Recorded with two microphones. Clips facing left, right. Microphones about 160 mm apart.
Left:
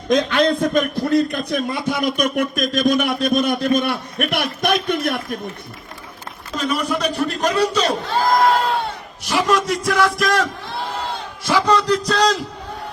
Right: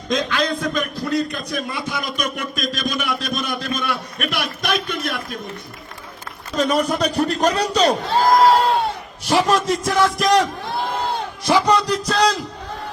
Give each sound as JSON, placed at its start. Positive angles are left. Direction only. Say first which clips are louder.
{"t": 0.3, "sound": "speech", "louder": "left 5 dB", "side_deg": 55}
{"t": 6.7, "sound": "speech", "louder": "even", "side_deg": -40}
{"t": 9.8, "sound": "music", "louder": "even", "side_deg": -20}
{"t": 11.4, "sound": "a man's voice", "louder": "even", "side_deg": -20}